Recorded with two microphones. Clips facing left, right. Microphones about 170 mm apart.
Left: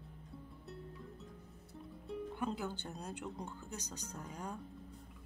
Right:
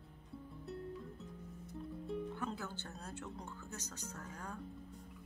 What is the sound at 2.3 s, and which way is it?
Speech, 15° left (ahead or behind).